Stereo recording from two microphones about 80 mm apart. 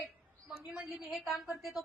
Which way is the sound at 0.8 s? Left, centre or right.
Centre.